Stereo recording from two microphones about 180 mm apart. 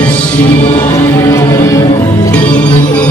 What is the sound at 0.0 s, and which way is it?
Music, 10° left (ahead or behind).